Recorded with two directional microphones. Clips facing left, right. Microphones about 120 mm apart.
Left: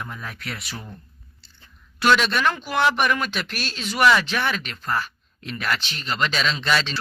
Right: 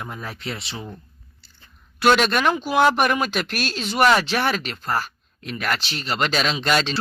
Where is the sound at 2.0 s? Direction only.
50° right (ahead or behind).